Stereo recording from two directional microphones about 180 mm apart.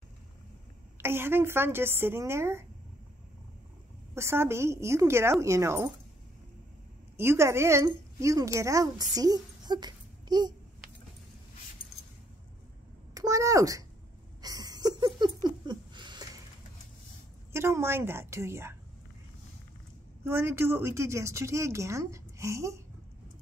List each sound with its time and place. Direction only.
0.9 s speech: 15° right (ahead or behind)
4.1 s speech: 15° right (ahead or behind)
7.2 s a woman's voice: 15° right (ahead or behind)
13.1 s speech: 20° right (ahead or behind)
14.4 s a sound: 20° right (ahead or behind)
17.5 s speech: 15° right (ahead or behind)
20.2 s speech: 15° right (ahead or behind)